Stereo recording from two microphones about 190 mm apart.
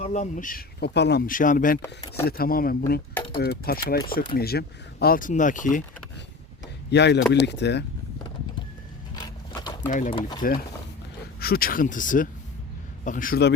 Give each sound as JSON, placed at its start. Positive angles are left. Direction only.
{"t": 0.0, "sound": "speech", "side_deg": 35}
{"t": 1.3, "sound": "speech", "side_deg": 45}
{"t": 1.8, "sound": "speech", "side_deg": 15}
{"t": 2.2, "sound": "speech", "side_deg": 50}
{"t": 6.9, "sound": "speech", "side_deg": 65}
{"t": 9.1, "sound": "a sound", "side_deg": 20}
{"t": 9.8, "sound": "speech", "side_deg": 40}
{"t": 10.1, "sound": "speech", "side_deg": 25}
{"t": 10.4, "sound": "speech", "side_deg": 50}